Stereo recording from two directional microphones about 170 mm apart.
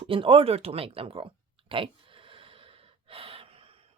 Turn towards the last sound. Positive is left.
turn(degrees=-35)  # may be behind; listen again after turning